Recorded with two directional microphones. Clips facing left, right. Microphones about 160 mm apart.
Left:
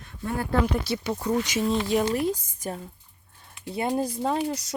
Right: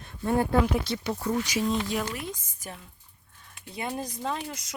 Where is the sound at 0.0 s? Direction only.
30° right (ahead or behind).